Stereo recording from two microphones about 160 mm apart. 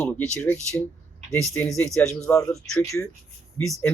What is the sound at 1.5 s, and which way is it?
Speech, 5° left (ahead or behind).